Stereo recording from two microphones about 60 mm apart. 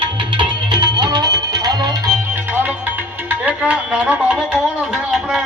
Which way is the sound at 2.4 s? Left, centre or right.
Right.